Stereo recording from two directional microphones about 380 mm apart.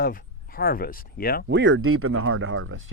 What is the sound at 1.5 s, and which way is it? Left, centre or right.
Speech, right.